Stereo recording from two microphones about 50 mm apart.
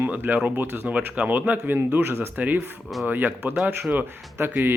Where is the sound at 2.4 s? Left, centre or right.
Right.